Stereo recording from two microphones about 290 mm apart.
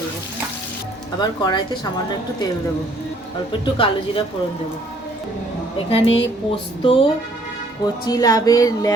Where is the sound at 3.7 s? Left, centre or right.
Centre.